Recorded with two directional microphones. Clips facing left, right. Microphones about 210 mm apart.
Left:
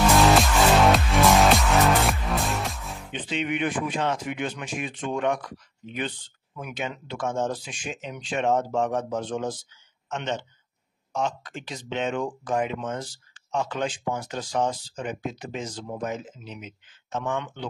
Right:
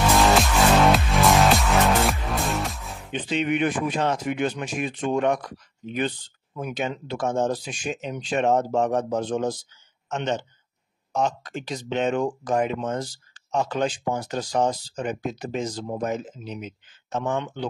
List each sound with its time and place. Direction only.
0.1 s music: centre (ahead or behind)
3.1 s speech: 40° right (ahead or behind)
6.5 s speech: 35° right (ahead or behind)